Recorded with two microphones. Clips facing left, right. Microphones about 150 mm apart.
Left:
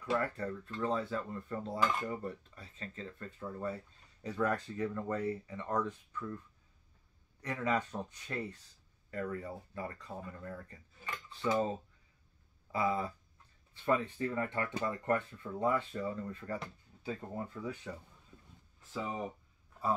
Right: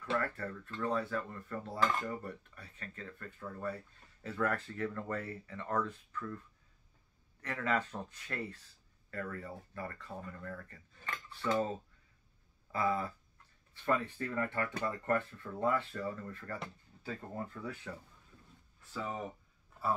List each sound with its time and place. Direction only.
0.0 s speech: 15° left (ahead or behind)
7.4 s speech: 15° left (ahead or behind)
12.7 s speech: 20° left (ahead or behind)